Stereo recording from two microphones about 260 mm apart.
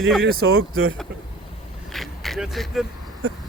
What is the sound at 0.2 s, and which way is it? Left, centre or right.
Speech, right.